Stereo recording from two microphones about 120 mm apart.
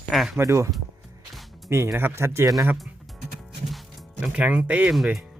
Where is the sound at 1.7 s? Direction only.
20° right (ahead or behind).